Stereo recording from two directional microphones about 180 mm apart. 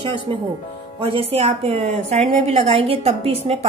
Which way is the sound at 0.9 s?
30° right (ahead or behind).